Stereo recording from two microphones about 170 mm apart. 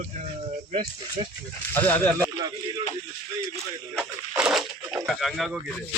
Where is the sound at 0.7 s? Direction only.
35° right (ahead or behind).